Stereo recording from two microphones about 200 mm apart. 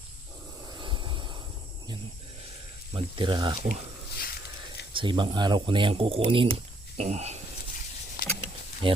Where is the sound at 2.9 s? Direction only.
25° right (ahead or behind).